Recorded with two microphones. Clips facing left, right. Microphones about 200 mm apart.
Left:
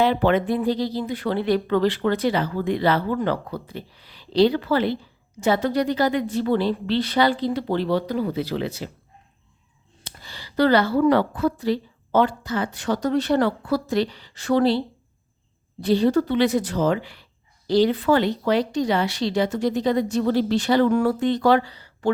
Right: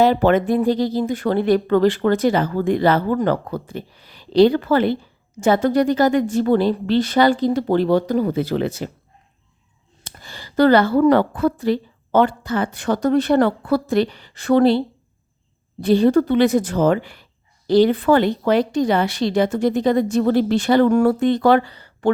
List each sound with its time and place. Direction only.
0.0 s speech: 40° right (ahead or behind)
10.0 s speech: 50° right (ahead or behind)
15.8 s speech: 55° right (ahead or behind)